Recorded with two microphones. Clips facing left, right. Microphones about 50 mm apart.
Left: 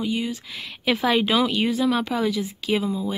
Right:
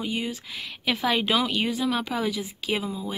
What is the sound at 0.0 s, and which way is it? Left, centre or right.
Speech, right.